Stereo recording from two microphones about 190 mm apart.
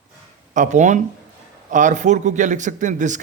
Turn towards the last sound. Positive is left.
turn(degrees=-40)  # may be behind; listen again after turning